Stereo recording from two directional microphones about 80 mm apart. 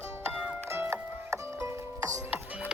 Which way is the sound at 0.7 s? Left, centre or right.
Right.